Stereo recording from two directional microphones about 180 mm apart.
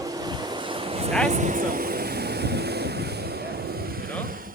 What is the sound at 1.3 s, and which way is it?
Vehicle, 45° right (ahead or behind).